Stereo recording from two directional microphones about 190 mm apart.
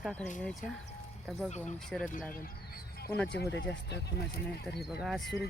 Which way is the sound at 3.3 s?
65° left (ahead or behind).